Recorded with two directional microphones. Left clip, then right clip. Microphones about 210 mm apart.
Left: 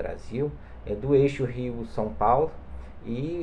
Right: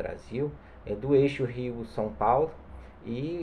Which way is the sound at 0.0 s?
5° right (ahead or behind).